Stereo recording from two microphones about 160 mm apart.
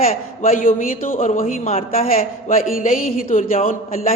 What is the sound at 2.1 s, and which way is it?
A man's voice, 60° left (ahead or behind).